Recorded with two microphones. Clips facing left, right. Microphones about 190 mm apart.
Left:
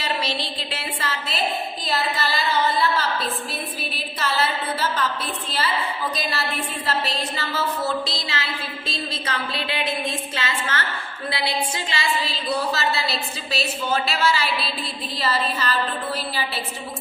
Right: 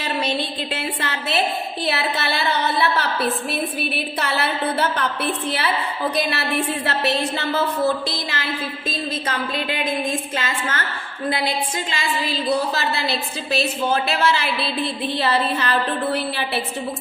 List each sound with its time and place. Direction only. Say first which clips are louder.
0.0 s a sound: right 3 dB; 55° right (ahead or behind)
1.8 s a woman's voice: right 3 dB; 65° right (ahead or behind)
6.8 s a woman's voice: right 4 dB; 70° right (ahead or behind); by 10.8 s 45° right (ahead or behind)
12.5 s a woman's voice: right 2 dB; 55° right (ahead or behind)